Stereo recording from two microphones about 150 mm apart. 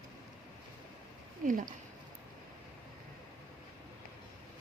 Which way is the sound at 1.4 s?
65° right (ahead or behind).